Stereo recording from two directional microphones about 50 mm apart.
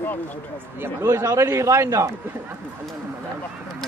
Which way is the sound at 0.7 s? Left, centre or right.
Right.